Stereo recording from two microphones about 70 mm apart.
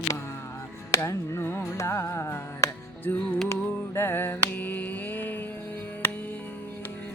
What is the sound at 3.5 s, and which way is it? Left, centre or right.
Mantra, left.